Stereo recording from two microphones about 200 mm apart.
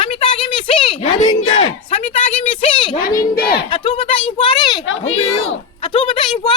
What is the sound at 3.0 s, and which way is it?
Speech, 45° left (ahead or behind).